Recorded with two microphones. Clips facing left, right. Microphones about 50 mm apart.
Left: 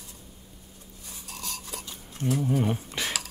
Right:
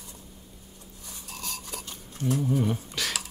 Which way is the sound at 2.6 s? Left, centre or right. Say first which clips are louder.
Even; left.